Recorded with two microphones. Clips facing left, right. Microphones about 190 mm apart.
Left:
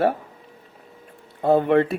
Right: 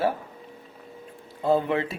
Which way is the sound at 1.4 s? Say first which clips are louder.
Left 6 dB; 60° left (ahead or behind).